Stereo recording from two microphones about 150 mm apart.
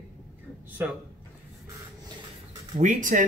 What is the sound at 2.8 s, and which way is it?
Speech, 55° right (ahead or behind).